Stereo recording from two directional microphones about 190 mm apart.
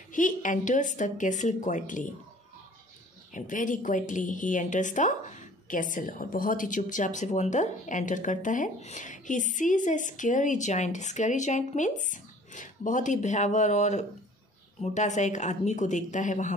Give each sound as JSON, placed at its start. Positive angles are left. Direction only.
{"t": 0.1, "sound": "a woman's voice", "side_deg": 45}
{"t": 3.3, "sound": "a woman's voice", "side_deg": 45}